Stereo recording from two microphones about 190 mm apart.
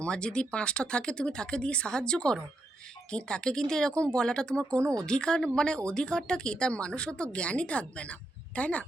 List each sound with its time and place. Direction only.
0.0 s speech: 5° left (ahead or behind)
4.8 s speech: 15° right (ahead or behind)
5.0 s speech: 5° left (ahead or behind)